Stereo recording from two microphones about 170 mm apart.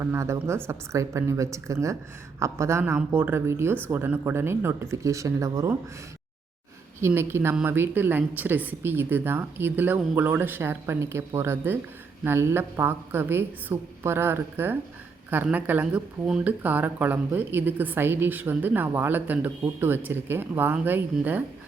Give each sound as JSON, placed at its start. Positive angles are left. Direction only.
{"t": 0.0, "sound": "speech", "side_deg": -15}
{"t": 7.0, "sound": "speech", "side_deg": -15}